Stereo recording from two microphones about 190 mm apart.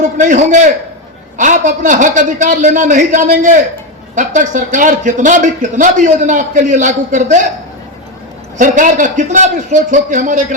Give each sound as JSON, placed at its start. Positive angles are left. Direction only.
{"t": 0.0, "sound": "a man's voice", "side_deg": -40}
{"t": 8.5, "sound": "a man's voice", "side_deg": -40}